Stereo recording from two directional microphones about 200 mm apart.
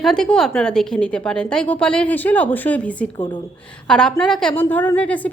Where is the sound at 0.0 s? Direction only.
5° left (ahead or behind).